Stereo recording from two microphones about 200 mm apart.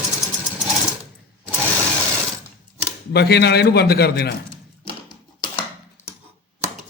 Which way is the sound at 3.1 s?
55° left (ahead or behind).